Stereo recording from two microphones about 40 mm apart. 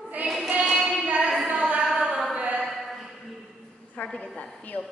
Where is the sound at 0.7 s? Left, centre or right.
Centre.